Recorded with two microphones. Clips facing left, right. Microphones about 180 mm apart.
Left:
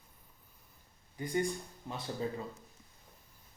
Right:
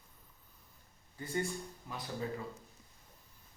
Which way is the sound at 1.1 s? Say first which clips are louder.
Left 4 dB; 15° left (ahead or behind).